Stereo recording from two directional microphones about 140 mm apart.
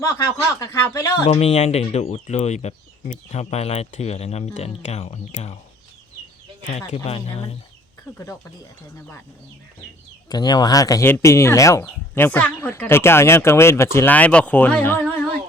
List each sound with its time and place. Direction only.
0.6 s speech: 20° left (ahead or behind)
1.2 s speech: 45° left (ahead or behind)
6.9 s speech: 45° left (ahead or behind)
10.2 s speech: 30° left (ahead or behind)